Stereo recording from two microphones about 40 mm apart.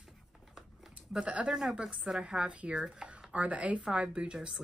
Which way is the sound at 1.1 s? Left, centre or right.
Right.